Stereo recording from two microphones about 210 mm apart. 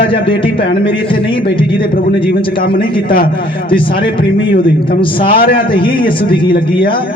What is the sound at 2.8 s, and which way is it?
Speech, 40° left (ahead or behind).